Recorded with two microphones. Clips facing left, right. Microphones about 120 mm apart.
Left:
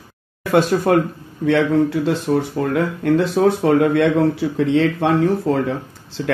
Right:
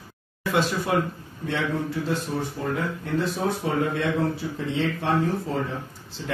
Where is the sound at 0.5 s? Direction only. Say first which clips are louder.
Left 9 dB; 55° left (ahead or behind).